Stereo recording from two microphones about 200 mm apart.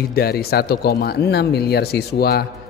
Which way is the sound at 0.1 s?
50° left (ahead or behind).